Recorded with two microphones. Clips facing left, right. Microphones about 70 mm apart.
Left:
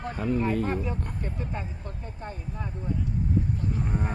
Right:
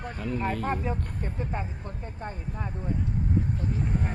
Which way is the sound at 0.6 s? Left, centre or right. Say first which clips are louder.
Even; right.